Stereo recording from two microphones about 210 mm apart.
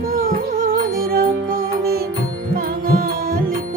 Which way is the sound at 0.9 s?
45° right (ahead or behind).